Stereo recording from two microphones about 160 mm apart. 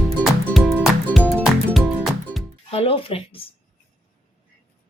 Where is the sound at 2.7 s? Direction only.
40° left (ahead or behind).